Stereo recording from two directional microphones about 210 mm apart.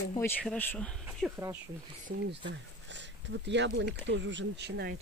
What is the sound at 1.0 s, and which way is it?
Speech, 10° right (ahead or behind).